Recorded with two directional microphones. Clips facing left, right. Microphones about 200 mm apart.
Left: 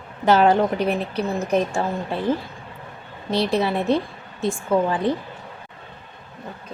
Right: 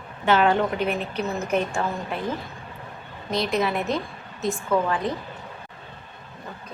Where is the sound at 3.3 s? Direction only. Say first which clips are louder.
Left 3 dB; 30° left (ahead or behind).